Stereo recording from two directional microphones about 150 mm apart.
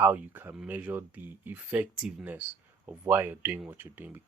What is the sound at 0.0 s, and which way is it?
Speech, 10° right (ahead or behind).